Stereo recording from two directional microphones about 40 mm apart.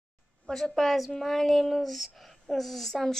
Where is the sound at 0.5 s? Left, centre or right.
Centre.